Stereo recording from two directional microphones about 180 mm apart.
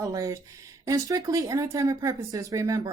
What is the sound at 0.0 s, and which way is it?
Speech, 20° right (ahead or behind).